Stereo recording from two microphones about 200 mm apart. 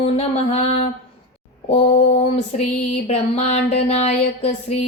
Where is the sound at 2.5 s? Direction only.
30° left (ahead or behind).